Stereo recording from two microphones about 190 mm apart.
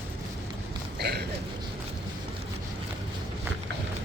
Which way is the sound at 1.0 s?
60° right (ahead or behind).